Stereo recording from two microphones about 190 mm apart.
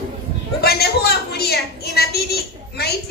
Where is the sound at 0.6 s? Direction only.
55° left (ahead or behind).